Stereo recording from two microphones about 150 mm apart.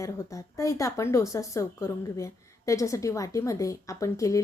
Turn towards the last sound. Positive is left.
turn(degrees=20)  # may be behind; listen again after turning